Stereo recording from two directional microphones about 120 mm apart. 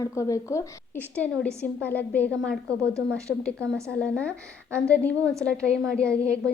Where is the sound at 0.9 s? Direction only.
10° left (ahead or behind).